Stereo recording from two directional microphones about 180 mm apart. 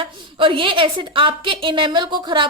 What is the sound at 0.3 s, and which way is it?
A woman's voice, 30° right (ahead or behind).